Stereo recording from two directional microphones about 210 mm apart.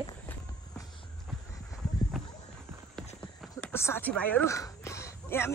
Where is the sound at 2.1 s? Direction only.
Centre (ahead or behind).